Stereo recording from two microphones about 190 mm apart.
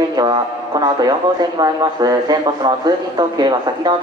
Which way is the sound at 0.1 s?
20° right (ahead or behind).